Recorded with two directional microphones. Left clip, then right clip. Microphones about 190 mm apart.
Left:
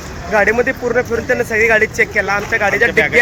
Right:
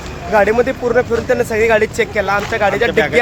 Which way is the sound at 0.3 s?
5° right (ahead or behind).